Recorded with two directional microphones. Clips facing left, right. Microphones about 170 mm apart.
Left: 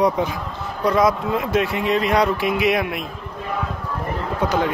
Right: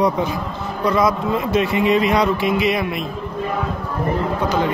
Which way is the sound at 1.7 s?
5° right (ahead or behind).